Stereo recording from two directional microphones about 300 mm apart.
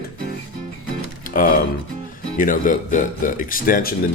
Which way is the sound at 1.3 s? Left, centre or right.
Left.